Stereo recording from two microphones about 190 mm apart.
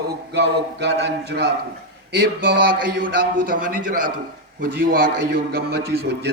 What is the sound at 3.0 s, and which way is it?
A man's voice, 50° right (ahead or behind).